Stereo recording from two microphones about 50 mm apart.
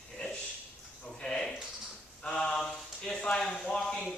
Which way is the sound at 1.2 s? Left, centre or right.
Centre.